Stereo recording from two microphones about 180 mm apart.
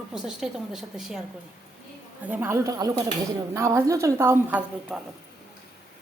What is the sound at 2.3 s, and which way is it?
A woman's voice, 15° right (ahead or behind).